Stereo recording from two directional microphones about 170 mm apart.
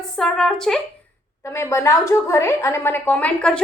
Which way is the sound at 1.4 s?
15° left (ahead or behind).